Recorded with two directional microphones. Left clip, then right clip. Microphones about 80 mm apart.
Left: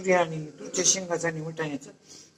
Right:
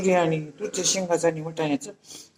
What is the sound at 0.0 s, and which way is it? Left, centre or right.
A man's voice, right.